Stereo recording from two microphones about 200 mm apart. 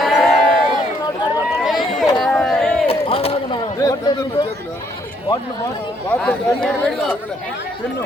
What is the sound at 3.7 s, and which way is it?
Speech, 15° left (ahead or behind).